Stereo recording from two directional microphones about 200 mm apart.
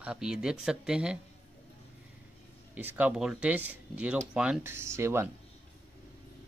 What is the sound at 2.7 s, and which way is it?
Speech, 10° right (ahead or behind).